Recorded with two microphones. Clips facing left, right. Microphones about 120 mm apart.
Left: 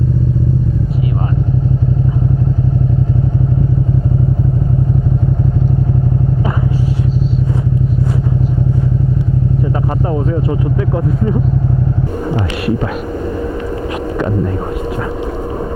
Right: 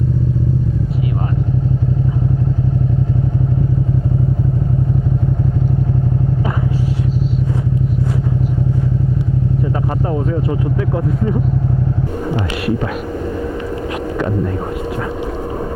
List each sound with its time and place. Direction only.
9.7 s speech: 25° left (ahead or behind)
13.8 s hum: 25° left (ahead or behind)